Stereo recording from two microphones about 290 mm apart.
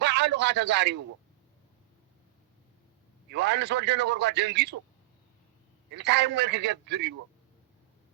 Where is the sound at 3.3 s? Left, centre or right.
Right.